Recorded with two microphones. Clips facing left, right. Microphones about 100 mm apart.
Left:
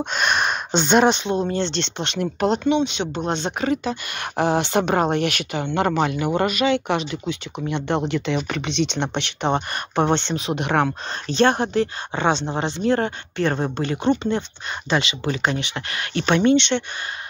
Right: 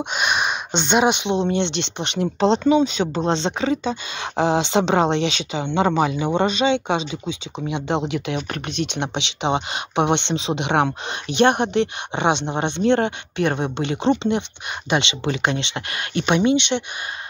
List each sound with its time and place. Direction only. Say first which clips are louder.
0.0 s a sound: left 1 dB; 5° right (ahead or behind)
1.1 s speech: right 2 dB; 20° right (ahead or behind)
2.6 s speech: right 3 dB; 40° right (ahead or behind); by 8.4 s 15° right (ahead or behind)
8.4 s speech: left 3 dB; 5° right (ahead or behind); by 16.3 s 25° right (ahead or behind)
16.3 s speech: left 1 dB; 15° right (ahead or behind)